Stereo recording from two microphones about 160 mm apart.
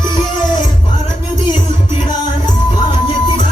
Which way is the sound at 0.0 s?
30° left (ahead or behind).